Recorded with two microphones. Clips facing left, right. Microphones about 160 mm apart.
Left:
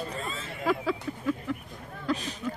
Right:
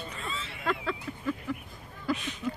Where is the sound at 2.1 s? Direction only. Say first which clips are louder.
Left 1 dB; 5° right (ahead or behind).